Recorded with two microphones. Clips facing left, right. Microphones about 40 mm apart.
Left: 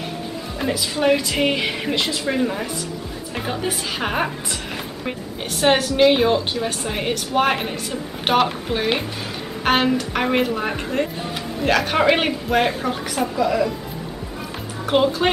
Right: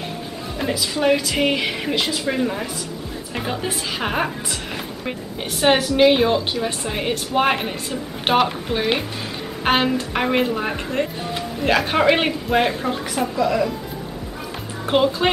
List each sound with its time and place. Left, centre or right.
0.6 s a woman's voice: centre
5.6 s a woman's voice: centre
15.2 s speech: centre